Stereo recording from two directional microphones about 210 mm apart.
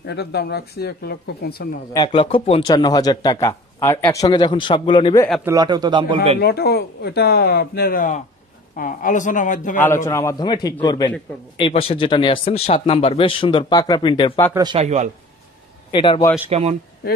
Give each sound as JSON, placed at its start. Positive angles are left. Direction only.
{"t": 0.0, "sound": "speech", "side_deg": 50}
{"t": 2.0, "sound": "a man's voice", "side_deg": 25}
{"t": 5.4, "sound": "a man's voice", "side_deg": -15}
{"t": 6.4, "sound": "a man's voice", "side_deg": 50}
{"t": 10.0, "sound": "a man's voice", "side_deg": 15}
{"t": 14.5, "sound": "a man's voice", "side_deg": -20}
{"t": 15.9, "sound": "a man's voice", "side_deg": 25}
{"t": 16.4, "sound": "a man's voice", "side_deg": -30}
{"t": 17.0, "sound": "speech", "side_deg": 45}